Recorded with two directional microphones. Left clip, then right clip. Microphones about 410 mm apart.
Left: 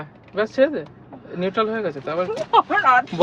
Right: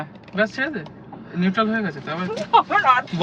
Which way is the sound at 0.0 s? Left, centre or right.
Centre.